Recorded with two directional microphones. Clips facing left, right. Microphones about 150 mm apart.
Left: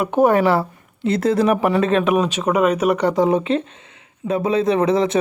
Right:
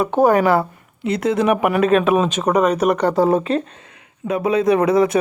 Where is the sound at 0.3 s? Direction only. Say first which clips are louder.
Right 1 dB; 25° left (ahead or behind).